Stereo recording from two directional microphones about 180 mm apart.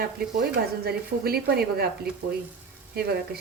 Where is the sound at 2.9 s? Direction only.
60° right (ahead or behind).